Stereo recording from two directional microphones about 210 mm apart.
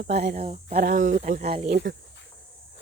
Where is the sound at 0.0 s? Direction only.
50° right (ahead or behind).